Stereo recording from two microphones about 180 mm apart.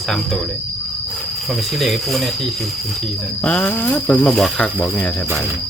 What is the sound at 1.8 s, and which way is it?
Speech, centre (ahead or behind).